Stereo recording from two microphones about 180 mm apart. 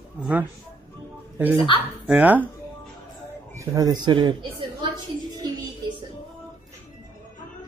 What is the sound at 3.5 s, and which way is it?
A man's voice, 15° right (ahead or behind).